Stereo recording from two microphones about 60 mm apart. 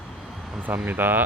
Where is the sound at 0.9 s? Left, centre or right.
Right.